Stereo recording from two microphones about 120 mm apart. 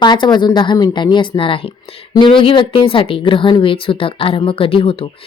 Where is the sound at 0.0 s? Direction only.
40° left (ahead or behind).